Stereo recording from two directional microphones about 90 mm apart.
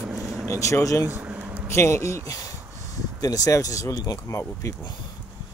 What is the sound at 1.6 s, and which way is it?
Speech, 30° left (ahead or behind).